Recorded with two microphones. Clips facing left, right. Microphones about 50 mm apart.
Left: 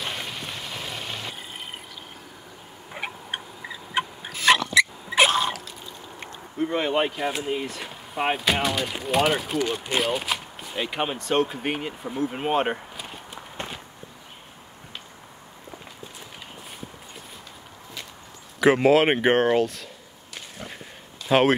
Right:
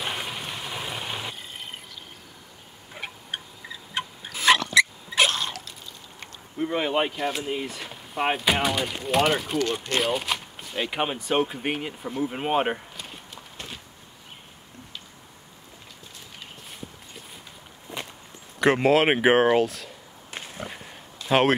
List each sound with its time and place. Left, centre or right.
0.0 s vehicle: centre
2.9 s turkey: centre
3.9 s a sound: centre
4.3 s dog: centre
5.1 s drip: centre
6.6 s speech: centre
12.7 s a sound: centre
13.3 s walk: left
17.9 s walk: right
18.6 s speech: centre
20.5 s a sound: centre